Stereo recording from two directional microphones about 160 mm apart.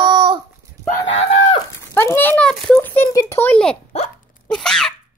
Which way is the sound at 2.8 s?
15° left (ahead or behind).